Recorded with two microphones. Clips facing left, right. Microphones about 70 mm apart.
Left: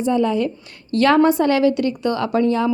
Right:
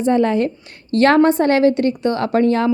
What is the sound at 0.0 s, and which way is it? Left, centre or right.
A woman's voice, right.